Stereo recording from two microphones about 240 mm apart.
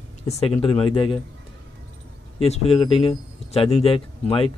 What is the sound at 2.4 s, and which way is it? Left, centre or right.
A man's voice, left.